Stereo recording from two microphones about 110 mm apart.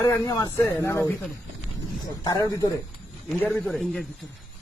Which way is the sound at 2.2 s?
35° left (ahead or behind).